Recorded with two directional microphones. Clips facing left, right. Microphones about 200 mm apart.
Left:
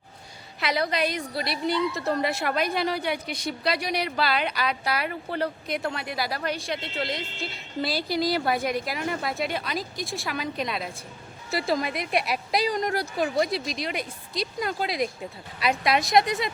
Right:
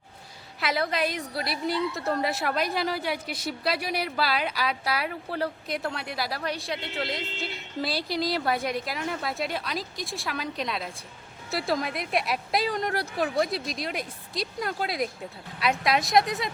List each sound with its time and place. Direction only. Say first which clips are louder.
0.6 s a woman's voice: left 1 dB; centre (ahead or behind)